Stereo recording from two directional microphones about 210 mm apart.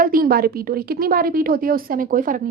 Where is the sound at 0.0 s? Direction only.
40° right (ahead or behind).